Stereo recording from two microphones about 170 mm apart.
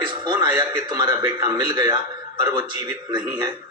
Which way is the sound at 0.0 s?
25° right (ahead or behind).